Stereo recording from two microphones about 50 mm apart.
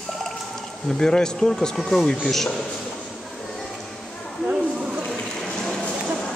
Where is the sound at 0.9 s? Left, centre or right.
Centre.